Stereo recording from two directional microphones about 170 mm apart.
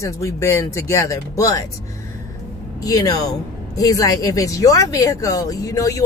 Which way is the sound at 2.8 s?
20° left (ahead or behind).